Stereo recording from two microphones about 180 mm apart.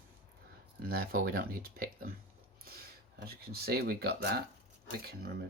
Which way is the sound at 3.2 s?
60° right (ahead or behind).